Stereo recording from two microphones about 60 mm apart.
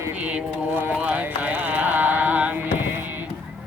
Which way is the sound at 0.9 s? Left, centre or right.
Right.